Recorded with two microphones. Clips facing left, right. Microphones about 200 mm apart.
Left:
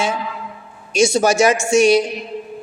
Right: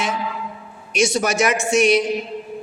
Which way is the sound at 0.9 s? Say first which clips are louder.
Left 4 dB; 30° left (ahead or behind).